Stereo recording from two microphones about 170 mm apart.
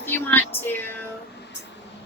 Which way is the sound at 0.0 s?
10° left (ahead or behind).